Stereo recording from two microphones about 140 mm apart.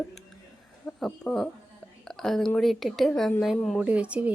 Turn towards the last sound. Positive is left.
turn(degrees=-10)  # may be behind; listen again after turning